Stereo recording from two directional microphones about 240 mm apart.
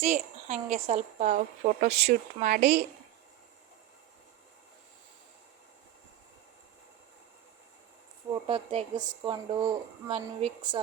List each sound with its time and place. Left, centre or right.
0.0 s speech: right
8.4 s speech: right